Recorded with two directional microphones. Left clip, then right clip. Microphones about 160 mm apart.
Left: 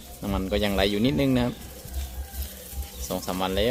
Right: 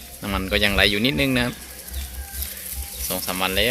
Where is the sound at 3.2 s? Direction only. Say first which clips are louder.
Right 5 dB; 25° left (ahead or behind).